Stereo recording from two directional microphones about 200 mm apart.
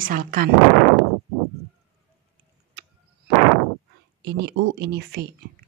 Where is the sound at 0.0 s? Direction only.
45° right (ahead or behind).